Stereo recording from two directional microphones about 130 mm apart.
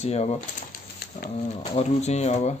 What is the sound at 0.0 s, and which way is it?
Speech, 55° left (ahead or behind).